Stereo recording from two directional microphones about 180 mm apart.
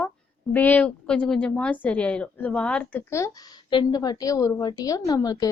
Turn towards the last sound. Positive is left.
turn(degrees=20)  # may be behind; listen again after turning